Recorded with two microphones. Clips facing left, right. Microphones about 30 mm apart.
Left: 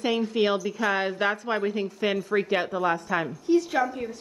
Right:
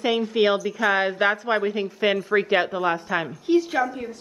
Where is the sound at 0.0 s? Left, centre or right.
Centre.